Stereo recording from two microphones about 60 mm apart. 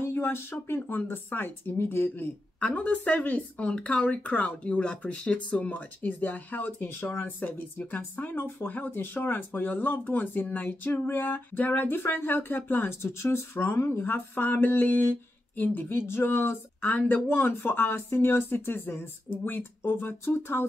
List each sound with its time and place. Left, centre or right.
0.0 s speech: left
2.6 s speech: left
14.0 s speech: left